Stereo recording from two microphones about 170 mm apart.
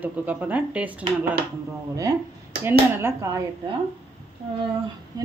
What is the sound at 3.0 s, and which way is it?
Speech, 15° right (ahead or behind).